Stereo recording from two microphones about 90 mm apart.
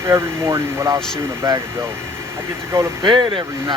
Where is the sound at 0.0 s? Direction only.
30° right (ahead or behind).